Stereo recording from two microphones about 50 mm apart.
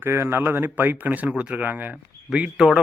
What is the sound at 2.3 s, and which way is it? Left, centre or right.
Speech, centre.